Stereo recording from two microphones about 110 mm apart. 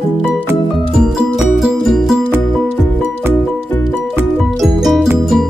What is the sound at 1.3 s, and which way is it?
Music, 5° right (ahead or behind).